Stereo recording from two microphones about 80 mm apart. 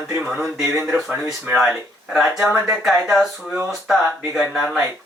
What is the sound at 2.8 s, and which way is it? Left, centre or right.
Speech, centre.